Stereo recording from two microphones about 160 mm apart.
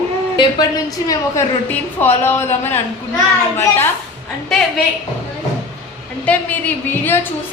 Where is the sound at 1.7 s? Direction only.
10° left (ahead or behind).